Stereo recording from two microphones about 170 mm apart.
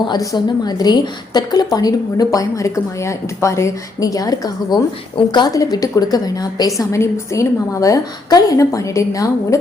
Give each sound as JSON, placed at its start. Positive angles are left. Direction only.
{"t": 0.0, "sound": "a woman's voice", "side_deg": 25}